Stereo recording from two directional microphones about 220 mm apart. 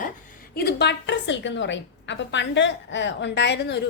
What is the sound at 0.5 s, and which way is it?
A woman's voice, 50° left (ahead or behind).